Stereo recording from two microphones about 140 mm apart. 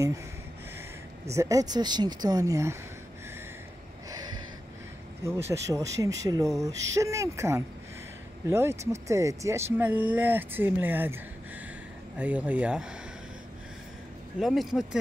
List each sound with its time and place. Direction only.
1.3 s speech: 20° right (ahead or behind)
5.2 s speech: 20° right (ahead or behind)
12.2 s speech: 10° right (ahead or behind)
14.4 s speech: centre (ahead or behind)